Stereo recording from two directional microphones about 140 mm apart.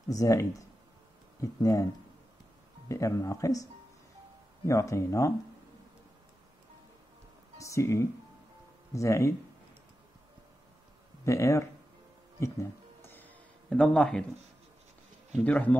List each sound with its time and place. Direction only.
0.1 s speech: 20° left (ahead or behind)
2.9 s speech: 20° left (ahead or behind)
4.6 s speech: 20° left (ahead or behind)
7.5 s speech: 20° left (ahead or behind)
11.2 s speech: 20° left (ahead or behind)
12.4 s a sound: 20° left (ahead or behind); by 14.2 s 5° left (ahead or behind)
15.4 s a man's voice: 10° left (ahead or behind)